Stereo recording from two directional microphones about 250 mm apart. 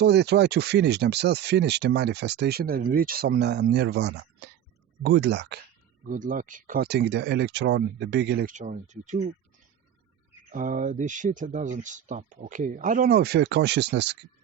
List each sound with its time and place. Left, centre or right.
0.0 s speech: right
6.1 s speech: right
10.5 s speech: right